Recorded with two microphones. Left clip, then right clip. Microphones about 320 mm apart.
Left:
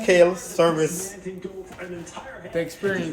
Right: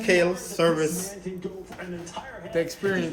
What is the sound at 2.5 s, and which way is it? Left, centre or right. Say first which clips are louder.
Speech: even; centre.